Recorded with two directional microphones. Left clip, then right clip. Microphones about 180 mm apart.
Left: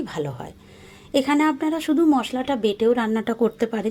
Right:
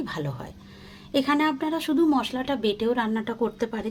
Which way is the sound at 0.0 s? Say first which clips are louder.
Left 4 dB; 10° left (ahead or behind).